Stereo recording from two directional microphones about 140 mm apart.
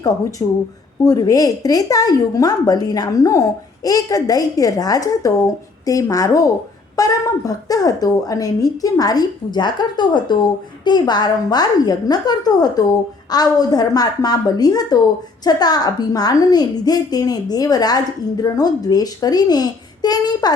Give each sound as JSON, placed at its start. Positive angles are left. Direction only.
{"t": 0.0, "sound": "a woman's voice", "side_deg": 25}